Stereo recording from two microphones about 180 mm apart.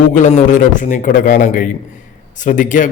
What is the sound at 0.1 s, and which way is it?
A man's voice, 45° left (ahead or behind).